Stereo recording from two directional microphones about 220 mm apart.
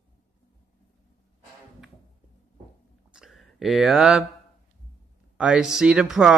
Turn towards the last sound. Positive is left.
turn(degrees=-5)  # may be behind; listen again after turning